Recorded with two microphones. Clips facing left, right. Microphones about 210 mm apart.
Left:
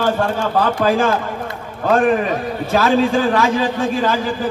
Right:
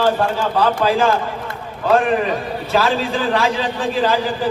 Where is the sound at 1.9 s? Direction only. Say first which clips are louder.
Left 1 dB; 45° left (ahead or behind).